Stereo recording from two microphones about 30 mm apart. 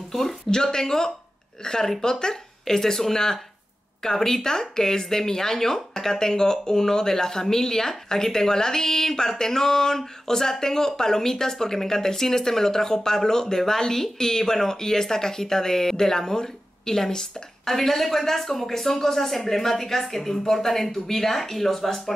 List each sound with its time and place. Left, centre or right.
0.1 s speech: centre
0.5 s speech: centre